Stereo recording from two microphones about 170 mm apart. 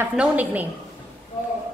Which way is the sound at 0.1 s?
10° right (ahead or behind).